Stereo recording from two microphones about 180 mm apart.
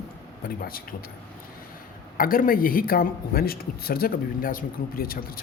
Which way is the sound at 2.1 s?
50° left (ahead or behind).